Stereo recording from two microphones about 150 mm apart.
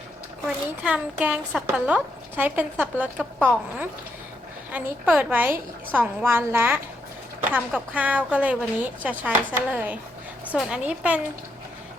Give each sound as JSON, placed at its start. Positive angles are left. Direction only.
{"t": 0.4, "sound": "speech", "side_deg": -10}
{"t": 4.7, "sound": "speech", "side_deg": -10}
{"t": 7.9, "sound": "speech", "side_deg": -10}